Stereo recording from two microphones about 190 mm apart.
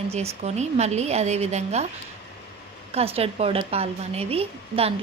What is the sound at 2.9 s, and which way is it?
A woman's voice, 30° right (ahead or behind).